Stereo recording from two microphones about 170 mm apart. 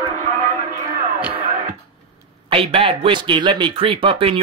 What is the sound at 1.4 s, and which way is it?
Music, 50° right (ahead or behind).